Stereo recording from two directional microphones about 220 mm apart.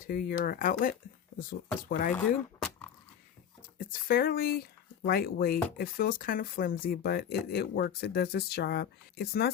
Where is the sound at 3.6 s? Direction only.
40° left (ahead or behind).